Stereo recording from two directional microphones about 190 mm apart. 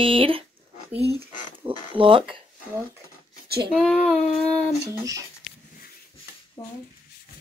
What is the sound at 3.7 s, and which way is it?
Child singing, centre (ahead or behind).